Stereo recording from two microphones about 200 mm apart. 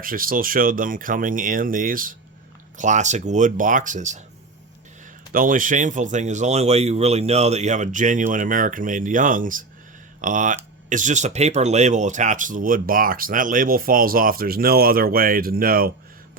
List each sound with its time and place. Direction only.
0.0 s speech: 45° right (ahead or behind)
5.3 s speech: 45° right (ahead or behind)